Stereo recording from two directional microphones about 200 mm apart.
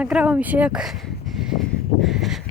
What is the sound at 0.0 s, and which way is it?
Speech, 5° right (ahead or behind).